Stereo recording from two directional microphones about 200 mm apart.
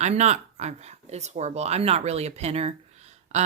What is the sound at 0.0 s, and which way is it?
Speech, 35° right (ahead or behind).